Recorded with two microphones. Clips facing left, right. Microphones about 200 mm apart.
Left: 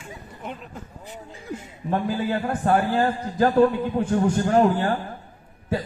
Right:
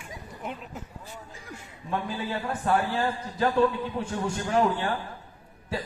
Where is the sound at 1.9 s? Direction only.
40° left (ahead or behind).